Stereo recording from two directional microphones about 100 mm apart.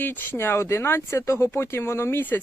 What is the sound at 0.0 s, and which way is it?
Speech, 20° left (ahead or behind).